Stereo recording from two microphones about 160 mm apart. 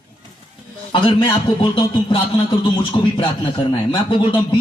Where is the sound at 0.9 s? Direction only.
30° left (ahead or behind).